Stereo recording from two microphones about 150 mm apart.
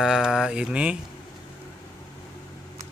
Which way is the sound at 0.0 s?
5° right (ahead or behind).